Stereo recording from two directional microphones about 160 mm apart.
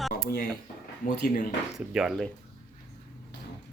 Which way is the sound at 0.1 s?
70° left (ahead or behind).